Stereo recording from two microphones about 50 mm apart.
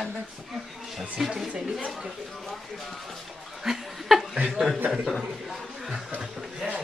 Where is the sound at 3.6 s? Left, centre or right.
Centre.